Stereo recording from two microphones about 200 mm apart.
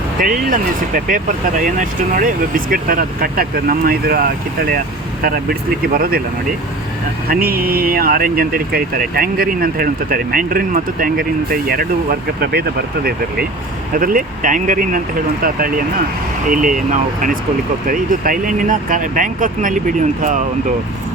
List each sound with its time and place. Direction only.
0.2 s speech: 45° right (ahead or behind)
5.2 s speech: 45° right (ahead or behind)
7.3 s speech: 50° right (ahead or behind)
13.9 s speech: 45° right (ahead or behind)
17.8 s speech: 45° right (ahead or behind)